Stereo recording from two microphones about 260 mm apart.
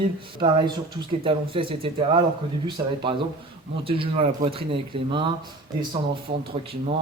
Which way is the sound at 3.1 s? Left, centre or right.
Centre.